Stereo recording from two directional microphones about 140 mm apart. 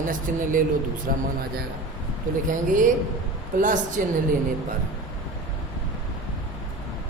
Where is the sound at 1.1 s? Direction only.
90° right.